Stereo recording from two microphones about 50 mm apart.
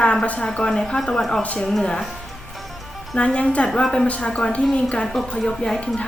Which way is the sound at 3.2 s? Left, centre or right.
Left.